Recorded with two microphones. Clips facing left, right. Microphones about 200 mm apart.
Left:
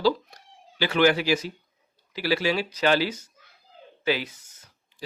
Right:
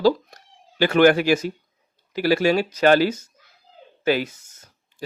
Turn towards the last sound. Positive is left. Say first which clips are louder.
# right 5 dB
turn(degrees=-45)  # may be behind; listen again after turning